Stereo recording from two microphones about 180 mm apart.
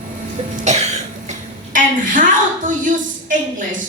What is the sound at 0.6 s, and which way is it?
Cough, 40° right (ahead or behind).